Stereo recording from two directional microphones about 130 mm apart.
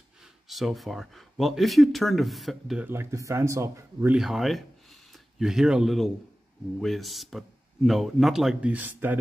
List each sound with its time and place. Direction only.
0.2 s speech: centre (ahead or behind)
2.8 s speech: 15° right (ahead or behind)
4.1 s speech: centre (ahead or behind)